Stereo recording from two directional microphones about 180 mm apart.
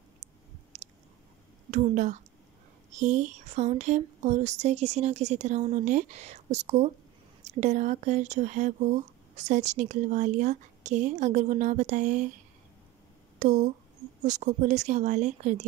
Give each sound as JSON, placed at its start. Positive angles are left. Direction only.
{"t": 0.7, "sound": "chewing", "side_deg": -40}
{"t": 1.7, "sound": "a woman's voice", "side_deg": -45}
{"t": 13.4, "sound": "speech", "side_deg": -40}